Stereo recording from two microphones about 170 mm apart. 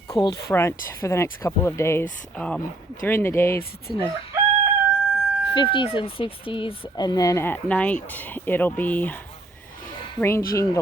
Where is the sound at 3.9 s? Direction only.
25° left (ahead or behind).